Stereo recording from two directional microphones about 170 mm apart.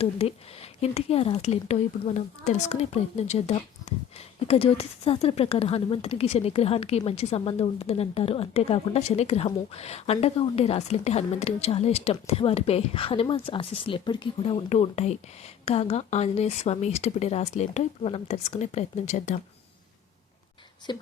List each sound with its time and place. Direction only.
0.0 s speech: 35° left (ahead or behind)
20.9 s speech: 25° left (ahead or behind)